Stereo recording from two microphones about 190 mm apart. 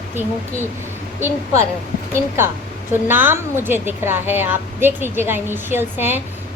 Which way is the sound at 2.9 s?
10° right (ahead or behind).